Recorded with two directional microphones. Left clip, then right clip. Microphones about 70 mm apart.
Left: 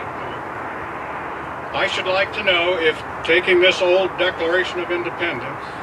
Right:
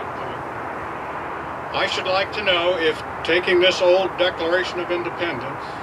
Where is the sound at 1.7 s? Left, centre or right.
Right.